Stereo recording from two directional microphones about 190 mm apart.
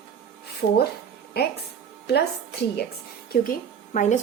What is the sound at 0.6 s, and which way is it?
Speech, 75° left (ahead or behind).